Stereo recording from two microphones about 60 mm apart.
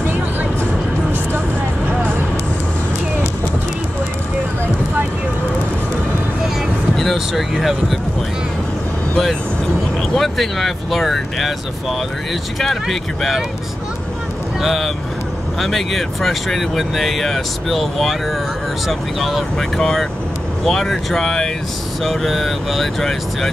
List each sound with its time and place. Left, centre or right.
0.0 s music: right
7.0 s speech: centre
10.1 s speech: centre
12.5 s speech: centre
14.6 s speech: centre